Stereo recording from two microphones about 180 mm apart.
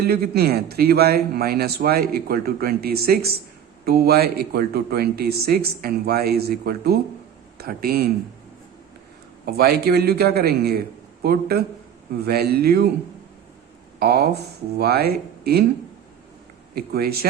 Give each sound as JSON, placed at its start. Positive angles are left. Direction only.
{"t": 0.0, "sound": "a man's voice", "side_deg": -60}
{"t": 9.5, "sound": "a man's voice", "side_deg": -60}
{"t": 14.0, "sound": "a man's voice", "side_deg": -60}
{"t": 16.7, "sound": "a man's voice", "side_deg": -60}